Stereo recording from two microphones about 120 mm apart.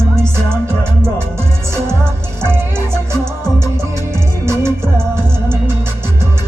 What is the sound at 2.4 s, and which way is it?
Music, 20° right (ahead or behind).